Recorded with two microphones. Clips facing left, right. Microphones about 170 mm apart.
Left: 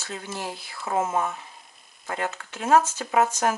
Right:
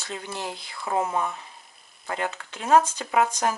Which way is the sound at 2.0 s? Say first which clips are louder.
Even; 15° right (ahead or behind).